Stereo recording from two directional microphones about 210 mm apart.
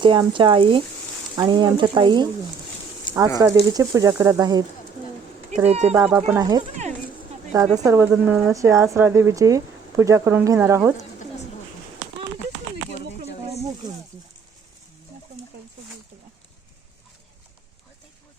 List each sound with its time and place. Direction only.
0.0 s speech: 25° right (ahead or behind)
3.3 s speech: 15° right (ahead or behind)
5.6 s speech: 30° right (ahead or behind)
5.9 s speech: 10° right (ahead or behind)